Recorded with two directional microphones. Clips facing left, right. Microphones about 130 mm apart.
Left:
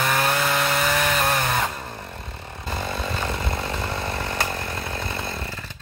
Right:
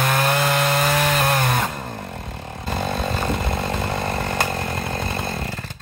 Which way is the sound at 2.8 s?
45° right (ahead or behind).